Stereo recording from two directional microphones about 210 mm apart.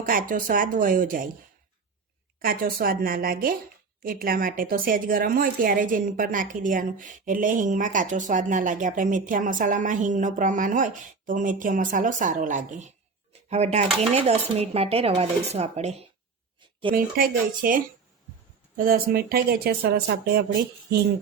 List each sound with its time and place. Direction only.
0.1 s a woman's voice: 40° right (ahead or behind)
2.4 s a woman's voice: 45° right (ahead or behind)
16.9 s a woman's voice: 40° right (ahead or behind)